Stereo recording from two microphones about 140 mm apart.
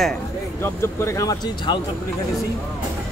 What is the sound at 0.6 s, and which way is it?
Speech, 20° left (ahead or behind).